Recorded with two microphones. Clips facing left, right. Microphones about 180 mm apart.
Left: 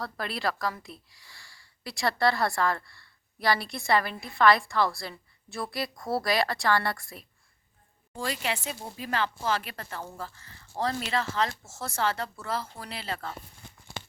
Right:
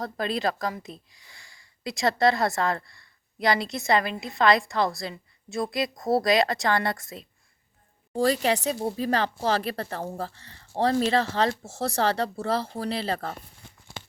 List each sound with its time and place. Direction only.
0.0 s speech: 20° right (ahead or behind)
8.1 s speech: 40° right (ahead or behind)